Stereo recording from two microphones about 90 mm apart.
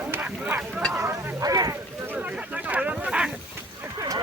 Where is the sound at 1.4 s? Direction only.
40° right (ahead or behind).